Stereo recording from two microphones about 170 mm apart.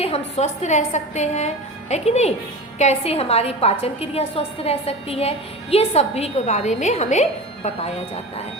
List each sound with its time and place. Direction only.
0.0 s a woman's voice: 40° left (ahead or behind)